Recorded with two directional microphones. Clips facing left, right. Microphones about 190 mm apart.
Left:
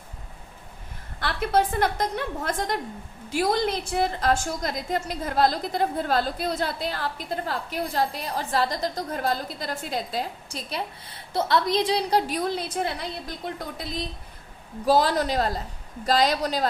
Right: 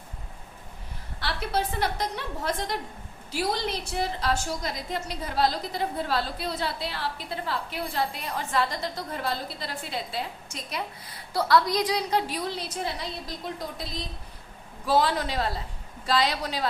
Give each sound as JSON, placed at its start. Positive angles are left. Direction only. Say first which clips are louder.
{"t": 1.2, "sound": "a woman's voice", "louder": "left 5 dB", "side_deg": 50}
{"t": 12.3, "sound": "a woman's voice", "louder": "left 5 dB", "side_deg": 50}
{"t": 14.8, "sound": "a woman's voice", "louder": "left 3 dB", "side_deg": 40}